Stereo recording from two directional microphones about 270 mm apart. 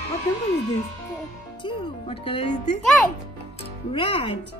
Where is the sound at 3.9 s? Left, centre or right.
Centre.